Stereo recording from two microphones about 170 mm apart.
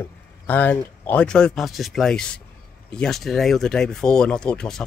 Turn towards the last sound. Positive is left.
turn(degrees=5)  # may be behind; listen again after turning